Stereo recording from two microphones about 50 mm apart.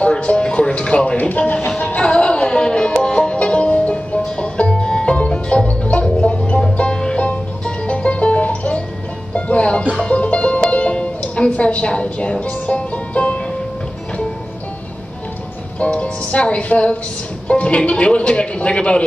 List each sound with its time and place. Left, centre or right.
0.0 s speech: left
1.8 s music: left
15.8 s speech: left